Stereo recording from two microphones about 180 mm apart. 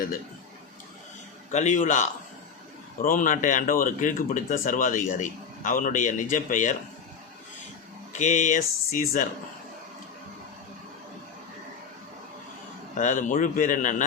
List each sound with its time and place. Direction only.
1.5 s speech: 40° left (ahead or behind)
8.1 s speech: 45° left (ahead or behind)
13.0 s speech: 45° left (ahead or behind)